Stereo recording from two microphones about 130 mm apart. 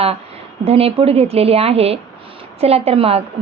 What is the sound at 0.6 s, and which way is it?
A woman's voice, 50° right (ahead or behind).